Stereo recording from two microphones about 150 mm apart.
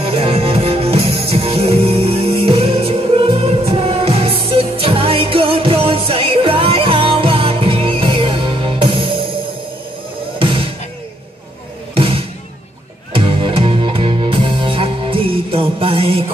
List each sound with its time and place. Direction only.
0.0 s music: 40° right (ahead or behind)
10.4 s music: 35° right (ahead or behind)
11.9 s music: 40° right (ahead or behind)